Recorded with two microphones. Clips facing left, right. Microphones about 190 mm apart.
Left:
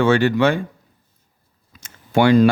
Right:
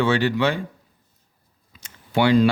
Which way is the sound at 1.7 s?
45° left (ahead or behind).